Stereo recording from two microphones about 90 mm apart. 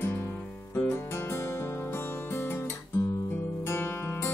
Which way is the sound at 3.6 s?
30° left (ahead or behind).